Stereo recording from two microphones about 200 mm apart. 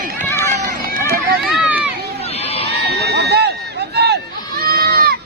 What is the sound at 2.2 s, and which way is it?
Run, 30° left (ahead or behind).